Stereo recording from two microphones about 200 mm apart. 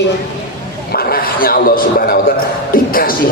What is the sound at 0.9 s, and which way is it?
A man's voice, 45° left (ahead or behind).